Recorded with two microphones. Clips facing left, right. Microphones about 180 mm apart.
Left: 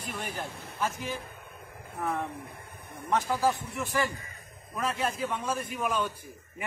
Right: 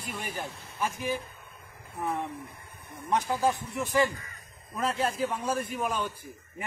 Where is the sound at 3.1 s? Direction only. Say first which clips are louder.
Even; 15° right (ahead or behind).